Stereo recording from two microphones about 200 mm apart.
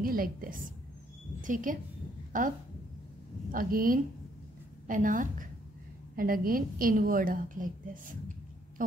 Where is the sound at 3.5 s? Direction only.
45° right (ahead or behind).